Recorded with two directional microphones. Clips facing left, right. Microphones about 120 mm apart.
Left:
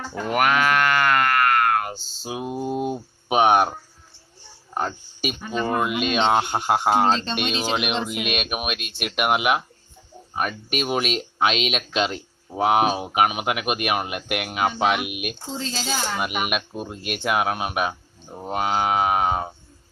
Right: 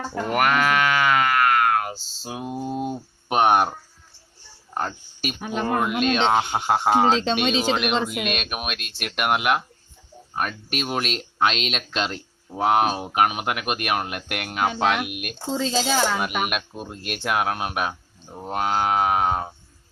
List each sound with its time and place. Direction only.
0.1 s moo: centre (ahead or behind)
4.7 s speech: 5° left (ahead or behind)
5.4 s speech: 70° right (ahead or behind)
5.6 s speech: 5° left (ahead or behind)